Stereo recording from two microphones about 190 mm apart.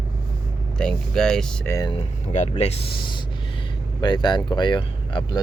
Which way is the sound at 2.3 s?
35° left (ahead or behind).